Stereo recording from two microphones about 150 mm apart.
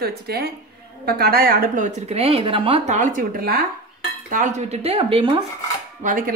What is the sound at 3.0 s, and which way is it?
Speech, 60° right (ahead or behind).